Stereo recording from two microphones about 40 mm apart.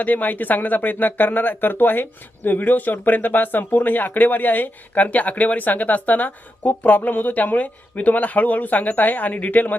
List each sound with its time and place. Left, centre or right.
0.0 s speech: left